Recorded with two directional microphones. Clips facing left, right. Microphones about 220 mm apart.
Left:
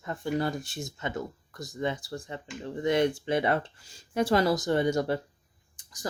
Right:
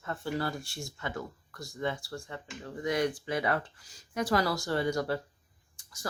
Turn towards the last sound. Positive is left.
turn(degrees=15)  # may be behind; listen again after turning